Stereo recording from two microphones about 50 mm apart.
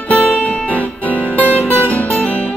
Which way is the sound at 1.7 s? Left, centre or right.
Left.